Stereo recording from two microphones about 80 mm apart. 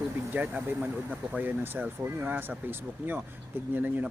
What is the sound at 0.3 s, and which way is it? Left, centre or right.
Speech, centre.